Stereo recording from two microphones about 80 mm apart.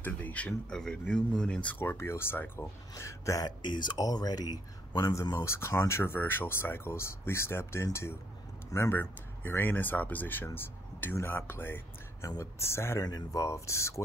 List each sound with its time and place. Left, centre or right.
0.0 s speech: centre
1.8 s speech: left
2.9 s speech: left
3.4 s speech: left
5.4 s speech: left
13.0 s speech: left